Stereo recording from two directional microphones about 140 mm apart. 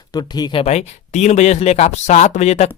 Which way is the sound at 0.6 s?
50° left (ahead or behind).